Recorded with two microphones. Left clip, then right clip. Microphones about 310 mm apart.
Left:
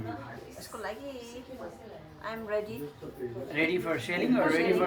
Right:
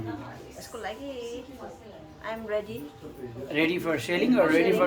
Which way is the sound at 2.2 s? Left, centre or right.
Centre.